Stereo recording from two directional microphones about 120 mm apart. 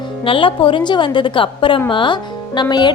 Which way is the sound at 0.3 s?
45° left (ahead or behind).